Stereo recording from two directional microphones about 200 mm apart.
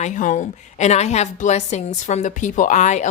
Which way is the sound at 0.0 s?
40° left (ahead or behind).